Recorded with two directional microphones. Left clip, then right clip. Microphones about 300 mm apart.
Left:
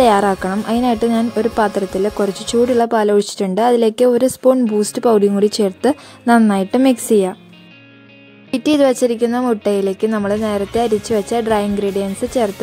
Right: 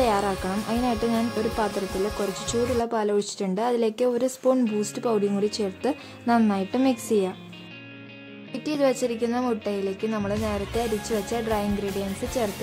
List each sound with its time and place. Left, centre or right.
0.0 s speech: left
8.5 s speech: left